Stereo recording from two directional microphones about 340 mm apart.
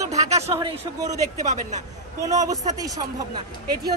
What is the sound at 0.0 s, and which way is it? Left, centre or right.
Speech, centre.